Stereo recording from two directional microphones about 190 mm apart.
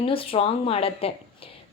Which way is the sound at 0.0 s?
30° left (ahead or behind).